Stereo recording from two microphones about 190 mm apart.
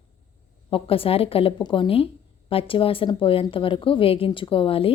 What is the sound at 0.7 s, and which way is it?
Speech, 30° left (ahead or behind).